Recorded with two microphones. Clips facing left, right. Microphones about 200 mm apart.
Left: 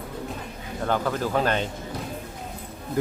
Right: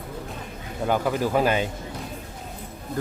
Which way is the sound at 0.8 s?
10° right (ahead or behind).